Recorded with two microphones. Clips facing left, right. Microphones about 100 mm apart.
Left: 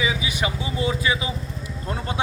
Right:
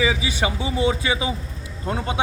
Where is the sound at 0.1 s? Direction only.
30° right (ahead or behind).